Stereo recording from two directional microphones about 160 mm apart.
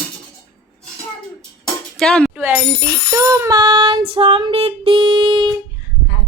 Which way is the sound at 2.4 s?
10° right (ahead or behind).